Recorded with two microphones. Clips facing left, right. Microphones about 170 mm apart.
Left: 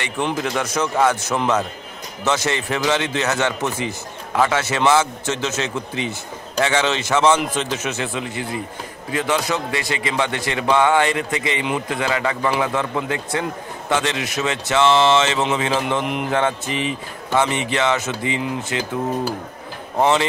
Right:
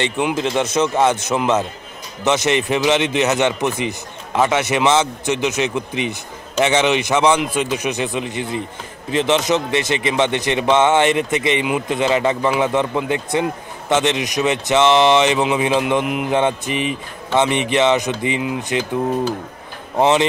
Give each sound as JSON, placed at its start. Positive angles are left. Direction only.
{"t": 0.4, "sound": "a man's voice", "side_deg": -25}
{"t": 20.0, "sound": "a man's voice", "side_deg": -20}